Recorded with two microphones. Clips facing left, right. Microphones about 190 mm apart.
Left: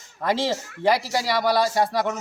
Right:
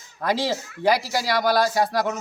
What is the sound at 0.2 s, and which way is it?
Speech, centre (ahead or behind).